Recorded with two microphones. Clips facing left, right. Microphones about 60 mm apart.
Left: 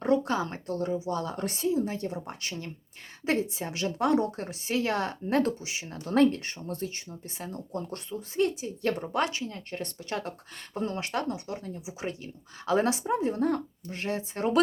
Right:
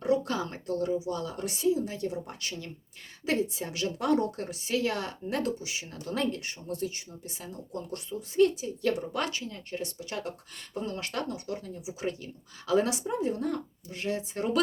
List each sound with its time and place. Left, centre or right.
0.4 s a woman's voice: left
10.9 s a woman's voice: left